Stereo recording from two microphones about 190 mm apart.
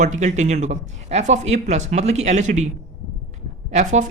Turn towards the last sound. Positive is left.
turn(degrees=-40)  # may be behind; listen again after turning